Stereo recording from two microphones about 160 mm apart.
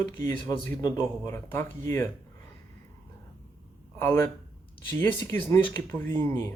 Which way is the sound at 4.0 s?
15° left (ahead or behind).